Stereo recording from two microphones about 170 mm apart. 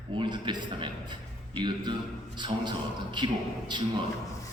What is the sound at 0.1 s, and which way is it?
A man's voice, 30° right (ahead or behind).